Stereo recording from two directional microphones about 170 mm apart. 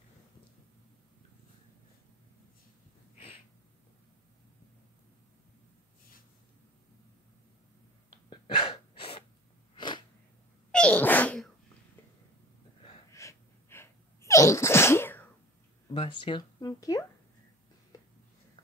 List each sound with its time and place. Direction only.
8.3 s sneeze: 30° left (ahead or behind)
10.7 s sneeze: 5° left (ahead or behind)
13.1 s sneeze: 15° left (ahead or behind)
15.9 s speech: 30° left (ahead or behind)
17.9 s a sound: 20° left (ahead or behind)